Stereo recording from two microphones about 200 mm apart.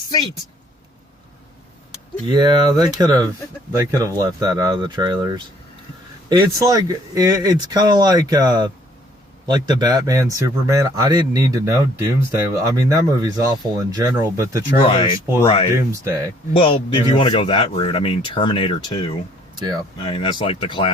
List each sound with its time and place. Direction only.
2.3 s speech: 20° right (ahead or behind)
14.8 s speech: 25° left (ahead or behind)
15.7 s speech: 15° right (ahead or behind)
16.5 s speech: 30° left (ahead or behind)
19.5 s speech: 20° right (ahead or behind)
20.0 s speech: 25° left (ahead or behind)